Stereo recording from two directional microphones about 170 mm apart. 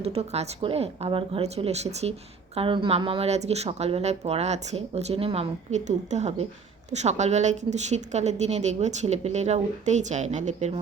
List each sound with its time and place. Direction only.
0.0 s a woman's voice: 35° right (ahead or behind)